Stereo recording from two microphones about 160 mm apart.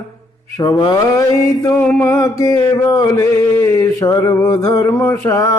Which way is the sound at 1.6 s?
10° left (ahead or behind).